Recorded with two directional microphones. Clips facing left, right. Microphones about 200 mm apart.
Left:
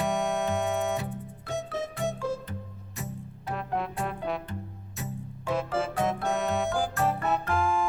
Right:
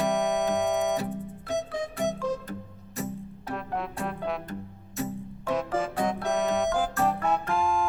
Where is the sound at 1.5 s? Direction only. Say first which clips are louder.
Right 2 dB; 15° right (ahead or behind).